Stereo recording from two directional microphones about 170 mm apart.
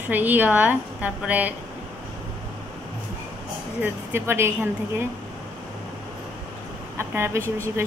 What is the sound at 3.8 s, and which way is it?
A woman's voice, 15° right (ahead or behind).